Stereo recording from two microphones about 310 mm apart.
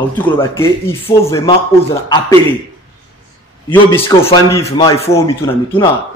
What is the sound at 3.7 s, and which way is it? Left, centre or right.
A man's voice, centre.